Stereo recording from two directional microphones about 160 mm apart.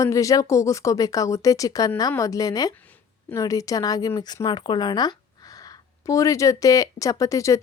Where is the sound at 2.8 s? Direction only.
10° left (ahead or behind).